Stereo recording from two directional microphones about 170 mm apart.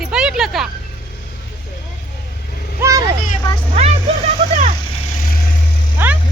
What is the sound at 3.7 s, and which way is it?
Vehicle, 35° right (ahead or behind).